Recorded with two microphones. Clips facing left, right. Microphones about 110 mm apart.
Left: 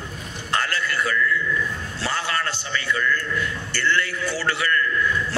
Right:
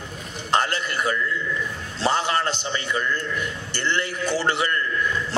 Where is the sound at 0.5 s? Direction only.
20° right (ahead or behind).